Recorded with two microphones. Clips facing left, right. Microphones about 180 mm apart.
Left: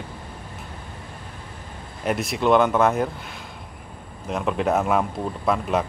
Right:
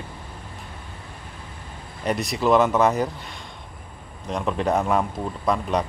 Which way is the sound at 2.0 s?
Centre (ahead or behind).